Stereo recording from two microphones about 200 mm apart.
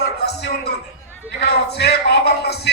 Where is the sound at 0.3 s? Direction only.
55° left (ahead or behind).